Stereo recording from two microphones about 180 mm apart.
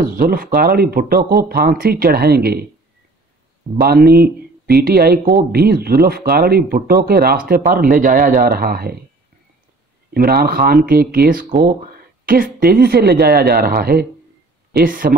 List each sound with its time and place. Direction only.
0.0 s speech: 55° right (ahead or behind)
3.8 s speech: 60° right (ahead or behind)
10.1 s speech: 55° right (ahead or behind)